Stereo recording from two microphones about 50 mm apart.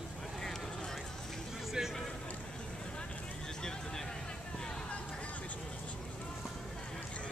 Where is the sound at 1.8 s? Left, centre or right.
Centre.